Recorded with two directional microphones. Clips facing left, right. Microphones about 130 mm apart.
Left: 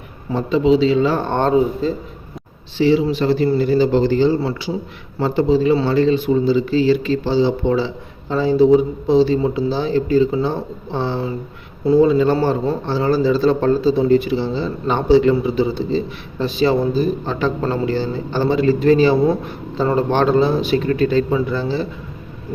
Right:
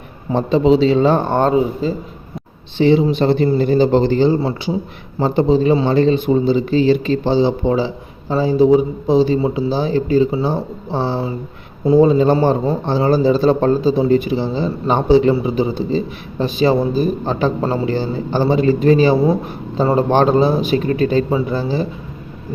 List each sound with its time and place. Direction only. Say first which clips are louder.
0.3 s a man's voice: right 2 dB; 30° right (ahead or behind)
1.5 s a man's voice: even; 5° right (ahead or behind)
2.7 s a man's voice: right 2 dB; 25° right (ahead or behind)
3.6 s speech: right 2 dB; 50° right (ahead or behind)
4.0 s a man's voice: right 1 dB; 20° right (ahead or behind)
19.1 s speech: right 1 dB; 5° right (ahead or behind)
19.7 s a man's voice: right 3 dB; 15° right (ahead or behind)